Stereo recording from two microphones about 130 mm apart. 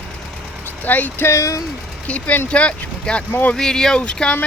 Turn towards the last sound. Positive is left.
turn(degrees=10)  # may be behind; listen again after turning